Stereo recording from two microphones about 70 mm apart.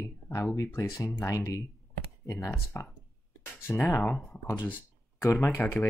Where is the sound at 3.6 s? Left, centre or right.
Left.